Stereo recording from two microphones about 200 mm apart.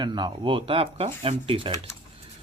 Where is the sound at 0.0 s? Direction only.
20° right (ahead or behind).